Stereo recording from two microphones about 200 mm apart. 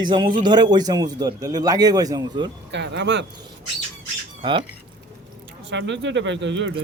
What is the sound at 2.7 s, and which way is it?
Speech, 60° right (ahead or behind).